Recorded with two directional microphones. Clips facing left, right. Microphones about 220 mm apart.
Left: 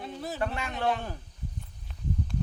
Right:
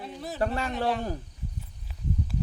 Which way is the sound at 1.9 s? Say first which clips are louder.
Right 1 dB; 5° right (ahead or behind).